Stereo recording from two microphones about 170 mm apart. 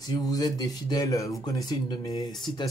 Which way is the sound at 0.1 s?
20° left (ahead or behind).